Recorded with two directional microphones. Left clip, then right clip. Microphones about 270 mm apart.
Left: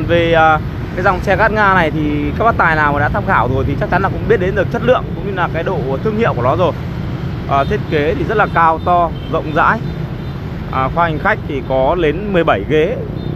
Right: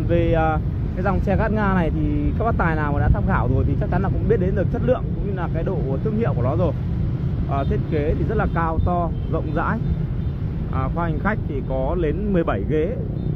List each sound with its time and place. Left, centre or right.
0.1 s speech: centre